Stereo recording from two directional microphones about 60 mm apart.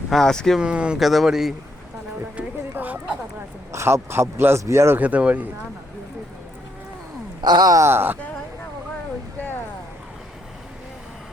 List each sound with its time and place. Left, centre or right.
0.1 s speech: centre
0.6 s speech: centre
0.9 s speech: centre
2.3 s a sound: right
3.7 s speech: right
4.9 s speech: right
7.6 s speech: right
7.9 s speech: right